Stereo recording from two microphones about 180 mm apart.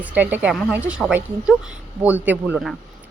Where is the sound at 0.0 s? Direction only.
10° right (ahead or behind).